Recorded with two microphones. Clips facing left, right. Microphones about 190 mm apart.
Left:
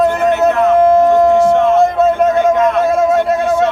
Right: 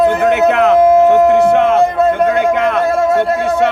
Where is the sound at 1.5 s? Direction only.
65° right (ahead or behind).